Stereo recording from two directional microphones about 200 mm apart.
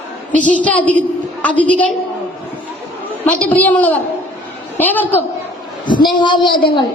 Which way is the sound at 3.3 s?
5° left (ahead or behind).